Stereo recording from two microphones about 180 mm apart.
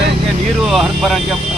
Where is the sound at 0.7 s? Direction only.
Centre (ahead or behind).